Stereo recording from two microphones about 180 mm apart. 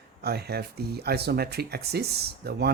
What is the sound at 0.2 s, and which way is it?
Speech, 60° right (ahead or behind).